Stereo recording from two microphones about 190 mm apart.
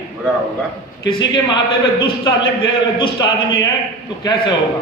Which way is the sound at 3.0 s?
25° left (ahead or behind).